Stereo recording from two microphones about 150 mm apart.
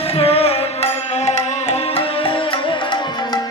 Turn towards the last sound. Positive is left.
turn(degrees=30)  # may be behind; listen again after turning